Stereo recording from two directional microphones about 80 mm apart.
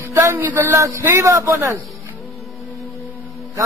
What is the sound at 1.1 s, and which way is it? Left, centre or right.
Speech, right.